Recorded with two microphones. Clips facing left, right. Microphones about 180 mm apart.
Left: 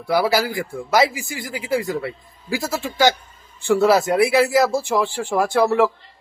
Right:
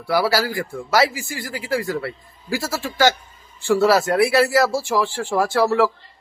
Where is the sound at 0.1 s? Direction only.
20° left (ahead or behind).